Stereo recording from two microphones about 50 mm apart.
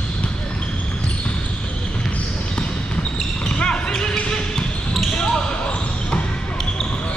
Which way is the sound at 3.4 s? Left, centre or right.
Centre.